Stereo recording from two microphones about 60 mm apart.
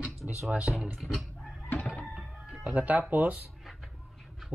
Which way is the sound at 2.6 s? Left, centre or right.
Right.